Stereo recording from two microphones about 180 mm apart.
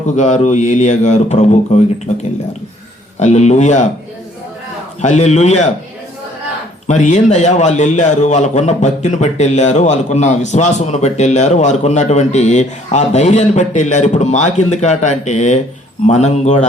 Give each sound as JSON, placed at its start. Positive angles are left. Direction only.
{"t": 0.2, "sound": "a man's voice", "side_deg": 40}
{"t": 3.2, "sound": "a man's voice", "side_deg": 40}
{"t": 5.0, "sound": "a man's voice", "side_deg": 40}
{"t": 6.8, "sound": "a man's voice", "side_deg": 40}